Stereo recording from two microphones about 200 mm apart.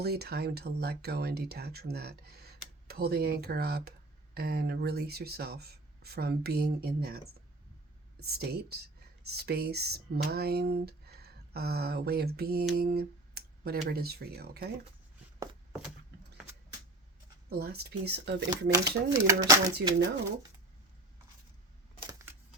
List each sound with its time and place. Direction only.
0.0 s speech: 55° right (ahead or behind)
8.2 s speech: 50° right (ahead or behind)
17.5 s speech: 50° right (ahead or behind)
18.7 s speech: 15° right (ahead or behind)